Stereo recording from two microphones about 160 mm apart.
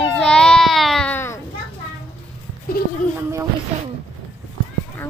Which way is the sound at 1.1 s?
15° left (ahead or behind).